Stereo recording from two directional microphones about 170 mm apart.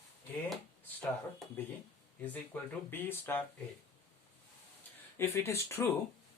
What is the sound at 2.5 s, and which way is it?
Speech, 10° left (ahead or behind).